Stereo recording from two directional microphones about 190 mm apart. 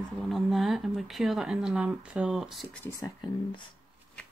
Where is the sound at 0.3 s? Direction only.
Centre (ahead or behind).